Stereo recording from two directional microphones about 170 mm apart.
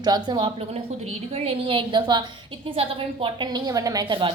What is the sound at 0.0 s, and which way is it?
A woman's voice, 25° right (ahead or behind).